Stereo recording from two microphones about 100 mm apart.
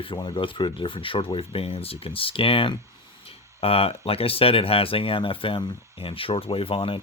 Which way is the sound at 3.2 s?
70° left (ahead or behind).